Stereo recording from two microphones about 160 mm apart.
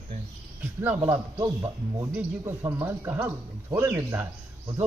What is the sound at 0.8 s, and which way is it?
Speech, 10° right (ahead or behind).